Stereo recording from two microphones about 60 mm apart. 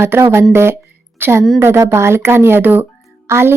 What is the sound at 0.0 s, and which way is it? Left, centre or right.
A woman's voice, right.